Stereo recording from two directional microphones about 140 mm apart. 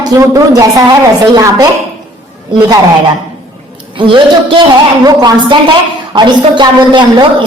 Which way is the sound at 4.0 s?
35° right (ahead or behind).